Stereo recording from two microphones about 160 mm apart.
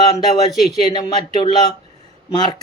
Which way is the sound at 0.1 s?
25° left (ahead or behind).